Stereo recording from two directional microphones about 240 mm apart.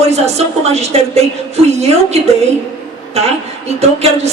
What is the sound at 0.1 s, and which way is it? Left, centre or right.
A woman's voice, right.